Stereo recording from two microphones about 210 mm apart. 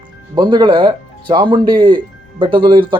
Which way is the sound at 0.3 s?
20° right (ahead or behind).